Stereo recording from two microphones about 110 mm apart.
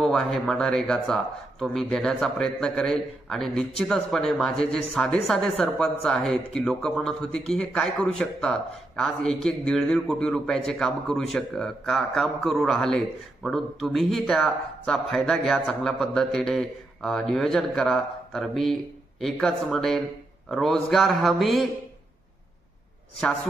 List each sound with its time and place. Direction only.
0.0 s a man's voice: 5° left (ahead or behind)